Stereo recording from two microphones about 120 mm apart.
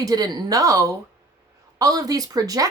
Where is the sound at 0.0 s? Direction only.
30° right (ahead or behind).